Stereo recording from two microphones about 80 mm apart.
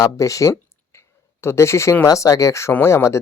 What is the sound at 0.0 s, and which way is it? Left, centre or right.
Speech, left.